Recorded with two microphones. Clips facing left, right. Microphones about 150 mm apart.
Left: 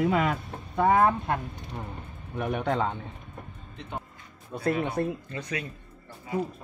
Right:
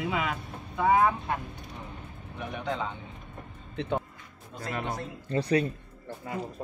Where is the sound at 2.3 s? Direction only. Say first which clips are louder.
Left 6 dB; 55° left (ahead or behind).